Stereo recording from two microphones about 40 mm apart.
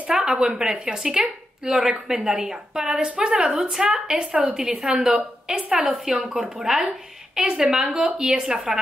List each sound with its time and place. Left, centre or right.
0.1 s speech: centre
2.9 s a woman's voice: right